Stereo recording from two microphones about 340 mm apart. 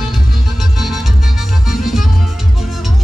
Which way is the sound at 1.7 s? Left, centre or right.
Centre.